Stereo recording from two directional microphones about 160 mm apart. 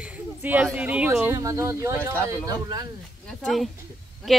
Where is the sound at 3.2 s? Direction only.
Centre (ahead or behind).